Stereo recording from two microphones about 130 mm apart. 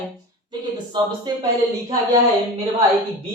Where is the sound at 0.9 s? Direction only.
35° right (ahead or behind).